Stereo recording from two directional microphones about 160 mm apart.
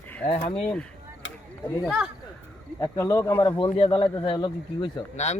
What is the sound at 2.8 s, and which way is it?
Speech, 20° left (ahead or behind).